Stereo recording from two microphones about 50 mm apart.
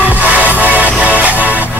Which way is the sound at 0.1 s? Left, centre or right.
Right.